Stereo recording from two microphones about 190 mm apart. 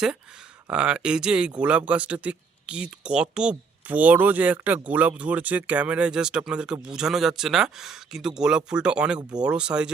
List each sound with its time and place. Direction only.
0.7 s speech: 5° right (ahead or behind)